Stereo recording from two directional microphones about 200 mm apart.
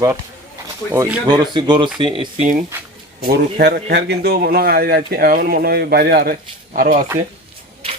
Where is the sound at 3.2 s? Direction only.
50° right (ahead or behind).